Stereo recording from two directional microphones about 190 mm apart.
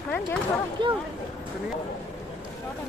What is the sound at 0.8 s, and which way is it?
Speech, 25° right (ahead or behind).